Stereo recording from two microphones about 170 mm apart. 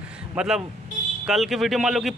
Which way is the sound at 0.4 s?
5° right (ahead or behind).